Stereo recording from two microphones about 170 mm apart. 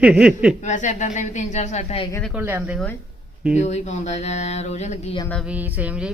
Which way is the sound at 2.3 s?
10° right (ahead or behind).